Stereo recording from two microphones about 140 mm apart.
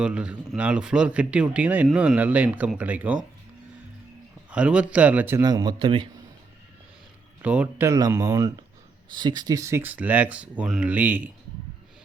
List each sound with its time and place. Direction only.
0.0 s speech: 10° right (ahead or behind)
4.5 s speech: 10° right (ahead or behind)
5.4 s speech: 30° right (ahead or behind)
7.4 s speech: 10° right (ahead or behind)
7.9 s speech: 25° right (ahead or behind)